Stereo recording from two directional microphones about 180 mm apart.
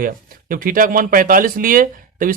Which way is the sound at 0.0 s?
50° right (ahead or behind).